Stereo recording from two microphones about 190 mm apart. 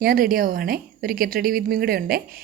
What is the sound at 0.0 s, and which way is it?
A woman's voice, 50° right (ahead or behind).